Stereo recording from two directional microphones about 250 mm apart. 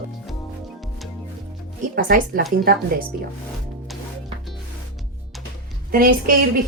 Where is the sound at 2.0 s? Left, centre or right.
Right.